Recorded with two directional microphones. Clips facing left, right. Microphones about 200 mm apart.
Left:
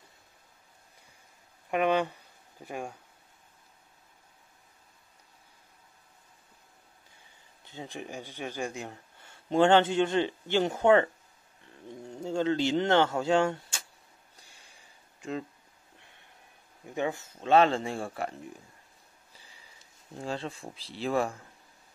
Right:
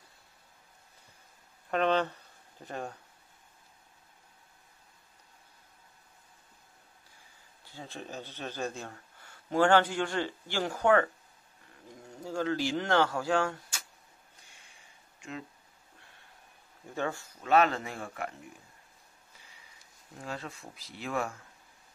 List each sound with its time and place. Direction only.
1.7 s speech: 10° left (ahead or behind)
7.6 s speech: 20° left (ahead or behind)
12.2 s speech: 25° left (ahead or behind)
15.1 s a sound: 35° left (ahead or behind)
16.8 s speech: 15° left (ahead or behind); by 18.3 s 30° left (ahead or behind)
20.2 s speech: 30° left (ahead or behind)